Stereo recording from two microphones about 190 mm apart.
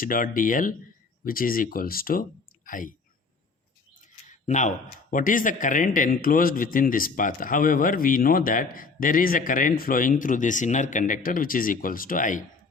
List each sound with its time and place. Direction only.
0.0 s a man's voice: 45° left (ahead or behind)
4.0 s bird: 40° left (ahead or behind)
5.1 s a man's voice: 45° left (ahead or behind)